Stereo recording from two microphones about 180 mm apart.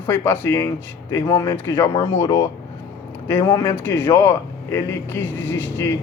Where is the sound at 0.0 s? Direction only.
10° left (ahead or behind).